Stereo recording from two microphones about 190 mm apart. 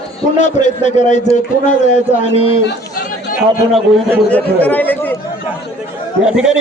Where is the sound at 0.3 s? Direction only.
40° left (ahead or behind).